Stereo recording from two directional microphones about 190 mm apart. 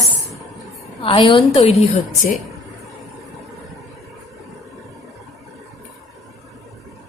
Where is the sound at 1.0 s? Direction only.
25° left (ahead or behind).